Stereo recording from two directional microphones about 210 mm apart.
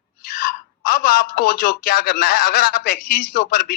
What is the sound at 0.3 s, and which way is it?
Speech, 45° left (ahead or behind).